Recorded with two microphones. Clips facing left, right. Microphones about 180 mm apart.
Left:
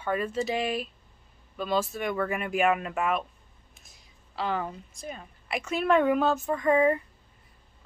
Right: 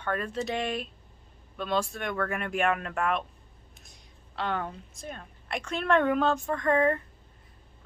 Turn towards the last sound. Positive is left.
turn(degrees=10)  # may be behind; listen again after turning